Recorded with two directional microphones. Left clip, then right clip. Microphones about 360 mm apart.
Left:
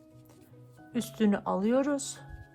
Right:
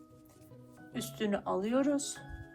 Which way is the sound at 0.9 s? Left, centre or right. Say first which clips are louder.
Left 5 dB; left.